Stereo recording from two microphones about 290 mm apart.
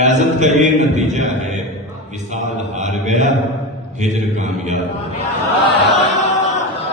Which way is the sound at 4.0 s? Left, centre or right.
Right.